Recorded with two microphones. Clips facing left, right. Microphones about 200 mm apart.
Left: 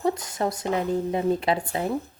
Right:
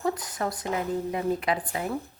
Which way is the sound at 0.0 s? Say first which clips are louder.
Left 4 dB; 25° left (ahead or behind).